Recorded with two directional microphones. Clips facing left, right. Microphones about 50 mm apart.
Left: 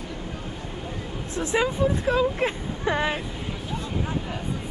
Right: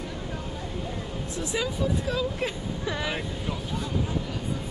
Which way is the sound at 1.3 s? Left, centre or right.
Left.